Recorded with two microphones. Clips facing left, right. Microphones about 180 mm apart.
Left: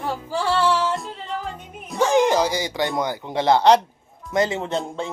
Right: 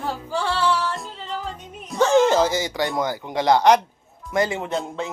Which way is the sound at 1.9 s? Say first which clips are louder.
Right 1 dB; 15° left (ahead or behind).